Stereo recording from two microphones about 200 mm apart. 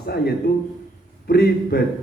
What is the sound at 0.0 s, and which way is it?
A man's voice, 50° left (ahead or behind).